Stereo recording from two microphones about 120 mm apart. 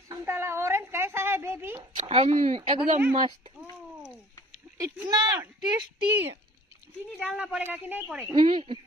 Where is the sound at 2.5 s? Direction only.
50° right (ahead or behind).